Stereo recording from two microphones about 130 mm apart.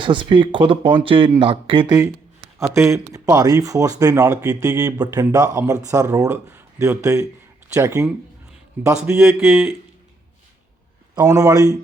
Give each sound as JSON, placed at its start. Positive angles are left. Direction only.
{"t": 0.0, "sound": "speech", "side_deg": -40}
{"t": 2.6, "sound": "speech", "side_deg": -20}
{"t": 8.8, "sound": "a man's voice", "side_deg": -15}
{"t": 9.2, "sound": "speech", "side_deg": 0}
{"t": 11.1, "sound": "speech", "side_deg": -30}